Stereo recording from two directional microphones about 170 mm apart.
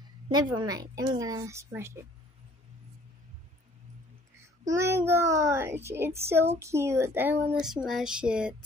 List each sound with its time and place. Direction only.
0.0 s a woman's voice: 25° right (ahead or behind)
4.4 s a child's voice: 15° right (ahead or behind)